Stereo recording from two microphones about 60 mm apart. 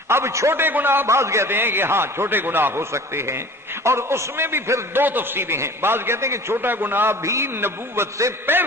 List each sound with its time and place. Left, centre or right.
0.1 s a man's voice: right
0.6 s a man's voice: right
1.0 s a man's voice: right
1.5 s a man's voice: right
7.2 s a man's voice: right